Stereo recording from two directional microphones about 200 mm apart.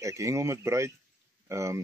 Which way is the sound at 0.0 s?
15° right (ahead or behind).